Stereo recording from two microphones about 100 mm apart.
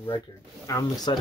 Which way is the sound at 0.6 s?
40° left (ahead or behind).